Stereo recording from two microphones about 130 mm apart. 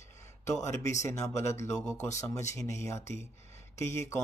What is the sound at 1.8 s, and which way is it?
Speech, 5° left (ahead or behind).